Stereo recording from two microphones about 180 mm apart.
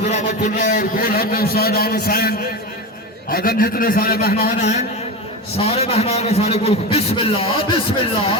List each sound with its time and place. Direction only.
0.1 s a man's voice: 40° left (ahead or behind)
4.4 s a man's voice: 40° left (ahead or behind)